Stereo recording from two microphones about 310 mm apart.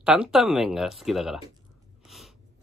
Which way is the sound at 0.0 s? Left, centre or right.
Centre.